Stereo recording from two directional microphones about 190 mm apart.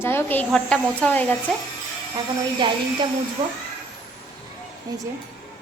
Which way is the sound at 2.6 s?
25° right (ahead or behind).